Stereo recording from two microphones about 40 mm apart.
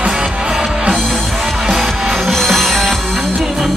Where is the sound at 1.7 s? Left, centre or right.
Centre.